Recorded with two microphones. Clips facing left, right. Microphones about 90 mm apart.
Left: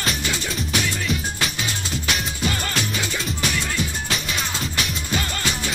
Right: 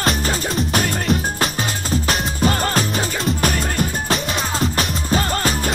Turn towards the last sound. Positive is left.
turn(degrees=-40)  # may be behind; listen again after turning